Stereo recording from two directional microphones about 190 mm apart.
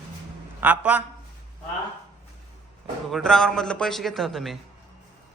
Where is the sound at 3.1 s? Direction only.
Centre (ahead or behind).